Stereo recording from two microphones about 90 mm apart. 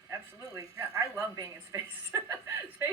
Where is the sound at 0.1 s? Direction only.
40° right (ahead or behind).